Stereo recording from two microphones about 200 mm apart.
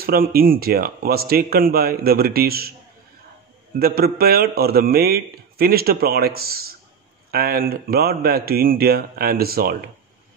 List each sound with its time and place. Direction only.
0.0 s a man's voice: 50° right (ahead or behind)
3.8 s a man's voice: 50° right (ahead or behind)